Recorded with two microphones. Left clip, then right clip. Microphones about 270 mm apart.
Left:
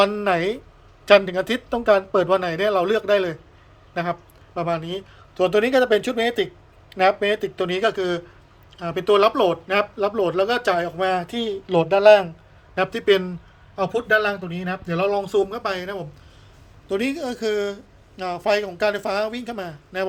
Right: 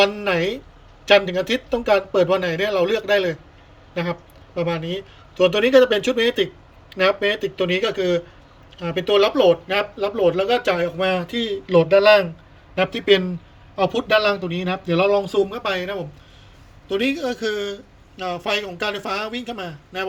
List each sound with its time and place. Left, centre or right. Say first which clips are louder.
0.0 s speech: even; centre